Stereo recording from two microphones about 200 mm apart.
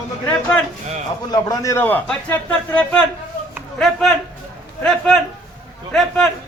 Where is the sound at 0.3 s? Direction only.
10° left (ahead or behind).